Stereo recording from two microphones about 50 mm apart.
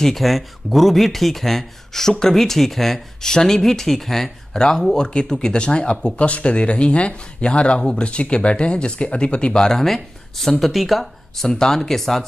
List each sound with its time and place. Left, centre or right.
0.0 s speech: centre
11.4 s speech: centre